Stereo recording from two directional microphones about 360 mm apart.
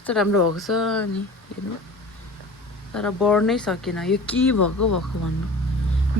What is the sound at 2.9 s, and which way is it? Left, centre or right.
Speech, centre.